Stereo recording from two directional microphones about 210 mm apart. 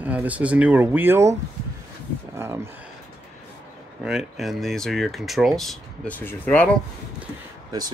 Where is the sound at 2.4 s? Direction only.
10° right (ahead or behind).